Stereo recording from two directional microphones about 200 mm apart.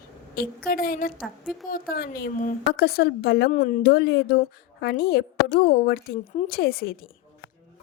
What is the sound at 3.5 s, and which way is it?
A woman's voice, 40° left (ahead or behind).